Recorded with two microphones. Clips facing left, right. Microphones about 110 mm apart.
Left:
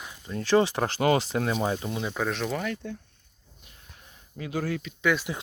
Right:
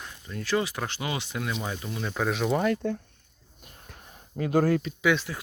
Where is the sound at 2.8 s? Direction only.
60° right (ahead or behind).